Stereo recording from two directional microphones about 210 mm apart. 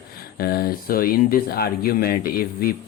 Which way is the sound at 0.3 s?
45° left (ahead or behind).